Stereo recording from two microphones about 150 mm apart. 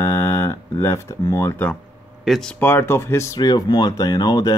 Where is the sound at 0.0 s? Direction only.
20° left (ahead or behind).